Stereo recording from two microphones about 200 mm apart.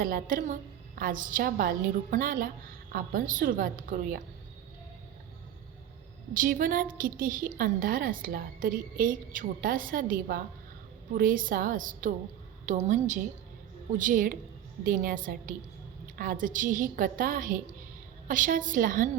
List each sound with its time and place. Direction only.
0.0 s a woman's voice: 45° right (ahead or behind)
6.3 s a woman's voice: 45° right (ahead or behind)